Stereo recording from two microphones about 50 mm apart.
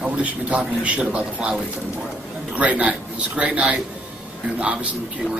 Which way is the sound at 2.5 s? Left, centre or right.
Right.